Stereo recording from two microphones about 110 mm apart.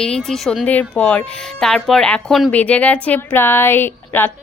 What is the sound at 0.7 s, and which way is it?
Speech, 15° left (ahead or behind).